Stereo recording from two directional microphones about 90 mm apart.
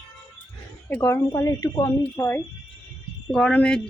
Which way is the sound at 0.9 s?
25° left (ahead or behind).